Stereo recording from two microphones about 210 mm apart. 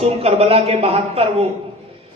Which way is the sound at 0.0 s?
30° right (ahead or behind).